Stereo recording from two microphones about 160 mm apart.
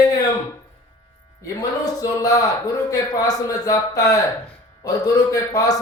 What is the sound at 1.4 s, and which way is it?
A man's voice, 20° left (ahead or behind).